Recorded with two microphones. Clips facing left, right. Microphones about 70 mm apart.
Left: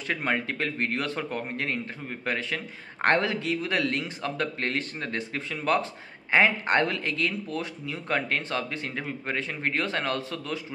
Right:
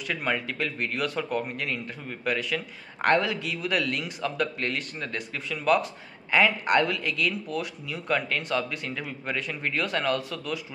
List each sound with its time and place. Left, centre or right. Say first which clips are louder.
0.0 s speech: left 1 dB; left